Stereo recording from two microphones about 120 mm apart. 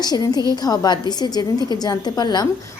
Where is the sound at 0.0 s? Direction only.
35° left (ahead or behind).